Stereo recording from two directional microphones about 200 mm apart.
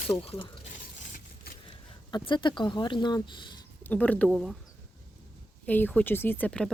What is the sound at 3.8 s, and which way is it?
Speech, 10° left (ahead or behind).